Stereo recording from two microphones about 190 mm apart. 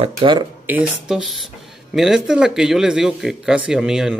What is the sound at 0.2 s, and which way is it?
Speech, 25° right (ahead or behind).